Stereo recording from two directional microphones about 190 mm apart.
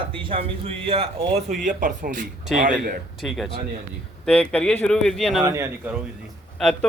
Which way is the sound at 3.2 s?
Centre (ahead or behind).